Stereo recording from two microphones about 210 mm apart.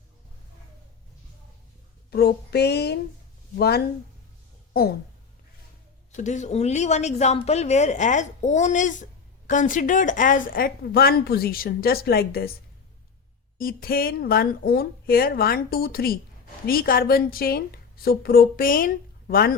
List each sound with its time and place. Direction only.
2.0 s a sound: 50° left (ahead or behind)
3.6 s speech: 50° left (ahead or behind)
6.1 s speech: 35° left (ahead or behind)
13.6 s speech: 45° left (ahead or behind)